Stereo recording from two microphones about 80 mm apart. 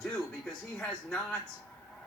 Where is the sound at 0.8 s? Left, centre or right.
Centre.